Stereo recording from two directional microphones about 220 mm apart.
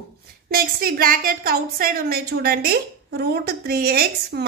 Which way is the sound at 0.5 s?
40° right (ahead or behind).